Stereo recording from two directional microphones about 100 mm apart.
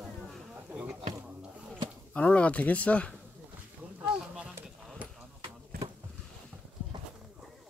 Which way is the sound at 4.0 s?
10° right (ahead or behind).